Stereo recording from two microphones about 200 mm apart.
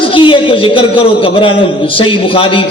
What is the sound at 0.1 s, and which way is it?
A man's voice, 25° left (ahead or behind).